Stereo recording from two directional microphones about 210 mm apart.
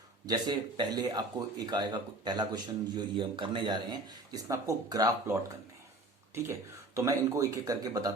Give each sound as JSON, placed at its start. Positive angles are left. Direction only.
{"t": 0.3, "sound": "speech", "side_deg": -20}